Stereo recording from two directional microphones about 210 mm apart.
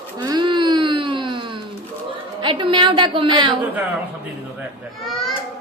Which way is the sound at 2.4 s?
25° right (ahead or behind).